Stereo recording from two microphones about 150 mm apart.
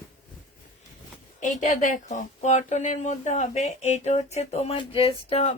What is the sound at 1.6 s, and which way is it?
Speech, 55° left (ahead or behind).